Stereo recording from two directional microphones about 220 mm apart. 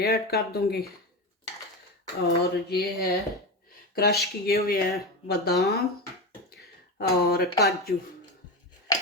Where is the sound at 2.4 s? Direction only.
45° left (ahead or behind).